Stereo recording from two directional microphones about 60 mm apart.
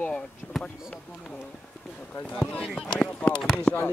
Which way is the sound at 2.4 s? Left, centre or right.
Centre.